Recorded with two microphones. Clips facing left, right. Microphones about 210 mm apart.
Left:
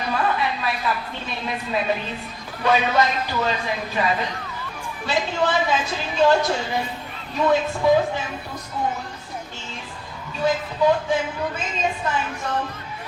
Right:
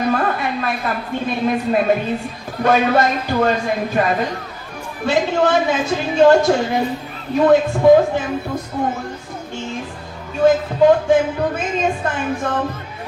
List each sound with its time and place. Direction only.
0.0 s a woman's voice: 50° right (ahead or behind)
10.3 s speech: 50° right (ahead or behind)